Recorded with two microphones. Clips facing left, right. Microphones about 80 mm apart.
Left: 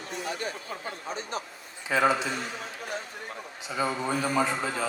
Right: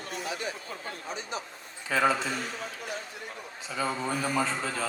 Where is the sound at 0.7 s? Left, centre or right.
Left.